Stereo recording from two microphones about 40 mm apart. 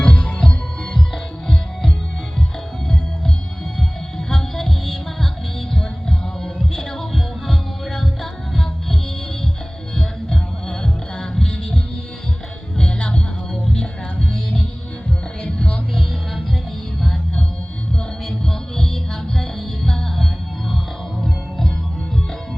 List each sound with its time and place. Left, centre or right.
0.0 s music: centre
4.3 s music: centre
7.1 s music: centre
10.0 s music: centre
14.3 s music: centre
18.3 s music: centre